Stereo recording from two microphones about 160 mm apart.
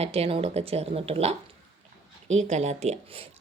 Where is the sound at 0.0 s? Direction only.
40° right (ahead or behind).